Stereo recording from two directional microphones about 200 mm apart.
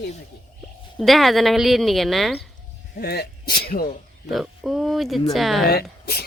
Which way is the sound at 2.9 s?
50° left (ahead or behind).